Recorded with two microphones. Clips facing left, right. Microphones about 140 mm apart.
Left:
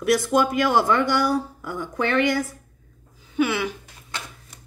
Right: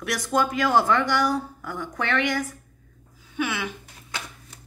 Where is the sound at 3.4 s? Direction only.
30° left (ahead or behind).